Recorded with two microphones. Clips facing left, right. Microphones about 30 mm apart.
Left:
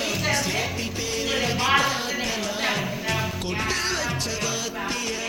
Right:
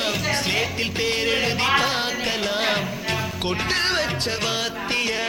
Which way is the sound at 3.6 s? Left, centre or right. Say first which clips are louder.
Right 4 dB; right.